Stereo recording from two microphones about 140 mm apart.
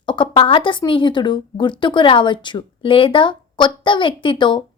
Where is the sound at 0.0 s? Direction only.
35° left (ahead or behind).